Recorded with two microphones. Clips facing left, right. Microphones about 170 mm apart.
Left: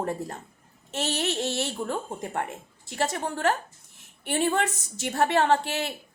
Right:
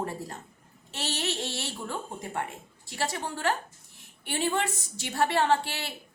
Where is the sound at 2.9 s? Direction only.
45° left (ahead or behind).